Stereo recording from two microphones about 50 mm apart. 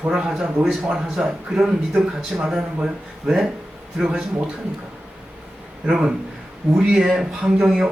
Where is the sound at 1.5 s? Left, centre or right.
Centre.